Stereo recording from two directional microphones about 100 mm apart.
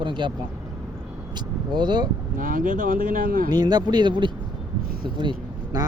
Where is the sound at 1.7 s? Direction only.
45° right (ahead or behind).